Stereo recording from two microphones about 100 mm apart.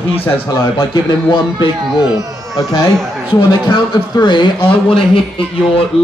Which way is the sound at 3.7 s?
50° left (ahead or behind).